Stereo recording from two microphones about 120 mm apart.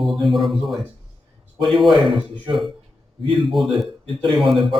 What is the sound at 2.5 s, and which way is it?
Speech, 40° right (ahead or behind).